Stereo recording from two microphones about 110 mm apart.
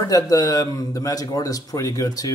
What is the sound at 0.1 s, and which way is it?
A man's voice, 35° left (ahead or behind).